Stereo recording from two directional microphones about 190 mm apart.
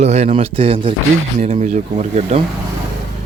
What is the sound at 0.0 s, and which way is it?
A man's voice, 35° right (ahead or behind).